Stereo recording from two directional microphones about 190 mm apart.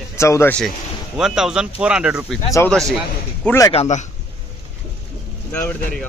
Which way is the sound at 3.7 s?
30° left (ahead or behind).